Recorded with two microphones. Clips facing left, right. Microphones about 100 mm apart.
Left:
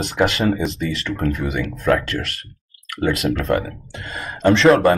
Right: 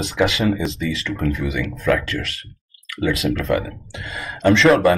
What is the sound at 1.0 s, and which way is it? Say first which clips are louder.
Speech: left 1 dB; 40° left (ahead or behind).